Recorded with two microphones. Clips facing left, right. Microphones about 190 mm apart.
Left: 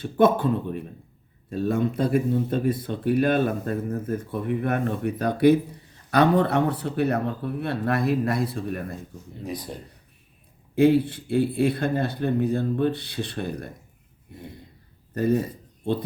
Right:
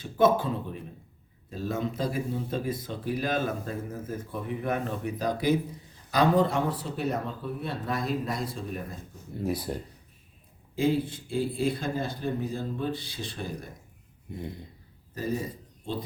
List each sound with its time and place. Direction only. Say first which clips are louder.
0.0 s speech: left 4 dB; 60° left (ahead or behind)
9.4 s speech: right 3 dB; 10° right (ahead or behind)
10.8 s speech: left 8 dB; 65° left (ahead or behind)
15.1 s speech: left 8 dB; 60° left (ahead or behind)